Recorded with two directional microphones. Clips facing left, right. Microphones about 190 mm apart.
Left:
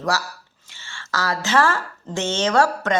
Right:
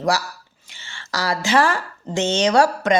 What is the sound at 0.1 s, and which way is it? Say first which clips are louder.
A woman's voice: right 2 dB; 15° right (ahead or behind).